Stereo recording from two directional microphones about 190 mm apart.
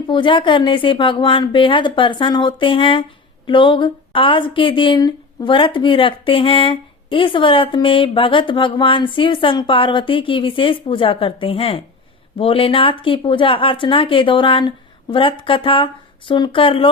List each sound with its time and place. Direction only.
0.1 s speech: 25° left (ahead or behind)